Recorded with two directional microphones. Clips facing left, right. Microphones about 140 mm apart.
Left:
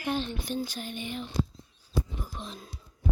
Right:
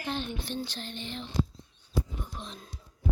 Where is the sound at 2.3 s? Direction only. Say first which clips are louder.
Left 2 dB; centre (ahead or behind).